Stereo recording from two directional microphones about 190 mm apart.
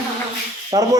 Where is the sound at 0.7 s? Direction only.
20° right (ahead or behind).